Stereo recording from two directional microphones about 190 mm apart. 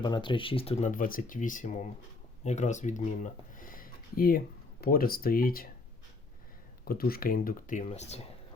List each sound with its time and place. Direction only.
0.0 s speech: 25° left (ahead or behind); by 5.6 s 50° left (ahead or behind)
6.8 s speech: 50° left (ahead or behind); by 8.2 s 35° left (ahead or behind)